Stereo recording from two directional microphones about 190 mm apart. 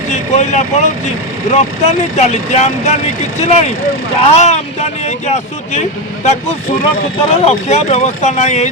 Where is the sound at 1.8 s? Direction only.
35° left (ahead or behind).